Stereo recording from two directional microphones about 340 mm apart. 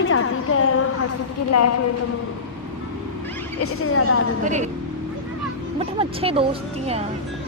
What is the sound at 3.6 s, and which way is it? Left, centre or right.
Speech, left.